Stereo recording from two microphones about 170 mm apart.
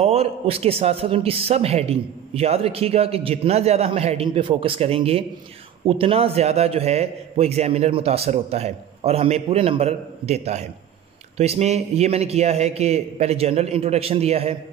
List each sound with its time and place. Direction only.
0.0 s a man's voice: 35° right (ahead or behind)